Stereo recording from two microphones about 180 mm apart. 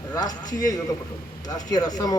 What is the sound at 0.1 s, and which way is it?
Speech, 20° left (ahead or behind).